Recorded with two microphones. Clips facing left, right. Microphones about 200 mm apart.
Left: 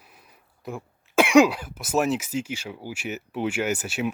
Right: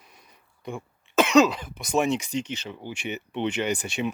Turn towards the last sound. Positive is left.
turn(degrees=5)  # may be behind; listen again after turning